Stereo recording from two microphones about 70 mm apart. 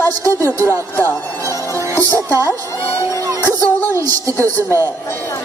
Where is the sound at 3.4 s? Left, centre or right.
Left.